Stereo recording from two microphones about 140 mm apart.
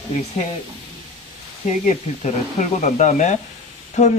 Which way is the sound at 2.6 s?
55° left (ahead or behind).